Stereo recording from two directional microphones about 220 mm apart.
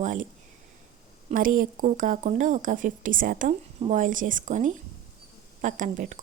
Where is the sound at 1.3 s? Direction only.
40° right (ahead or behind).